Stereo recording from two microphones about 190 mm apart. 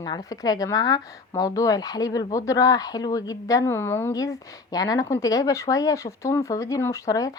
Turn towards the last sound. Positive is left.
turn(degrees=20)  # may be behind; listen again after turning